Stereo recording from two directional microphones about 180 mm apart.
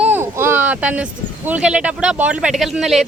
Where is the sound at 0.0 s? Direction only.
10° right (ahead or behind).